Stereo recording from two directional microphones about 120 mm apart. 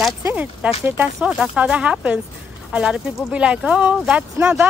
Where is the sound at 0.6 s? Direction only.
10° right (ahead or behind).